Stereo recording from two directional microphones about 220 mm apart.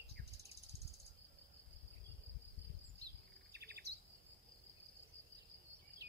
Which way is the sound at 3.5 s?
45° right (ahead or behind).